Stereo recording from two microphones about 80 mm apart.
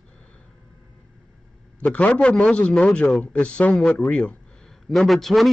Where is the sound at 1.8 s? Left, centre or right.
Centre.